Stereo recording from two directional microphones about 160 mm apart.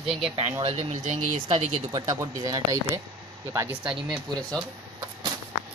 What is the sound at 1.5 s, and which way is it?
Speech, 25° right (ahead or behind).